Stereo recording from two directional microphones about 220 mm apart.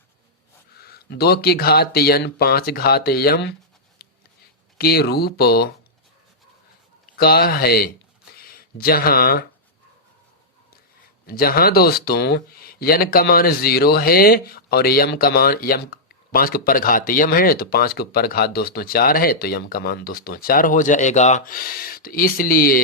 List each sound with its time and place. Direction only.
0.8 s speech: 45° left (ahead or behind)
4.0 s a sound: 45° left (ahead or behind)
4.8 s speech: 45° left (ahead or behind)
7.2 s speech: 45° left (ahead or behind)
11.3 s speech: 45° left (ahead or behind)